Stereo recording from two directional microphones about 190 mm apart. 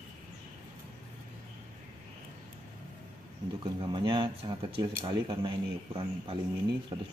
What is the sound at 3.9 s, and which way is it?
Speech, 25° right (ahead or behind).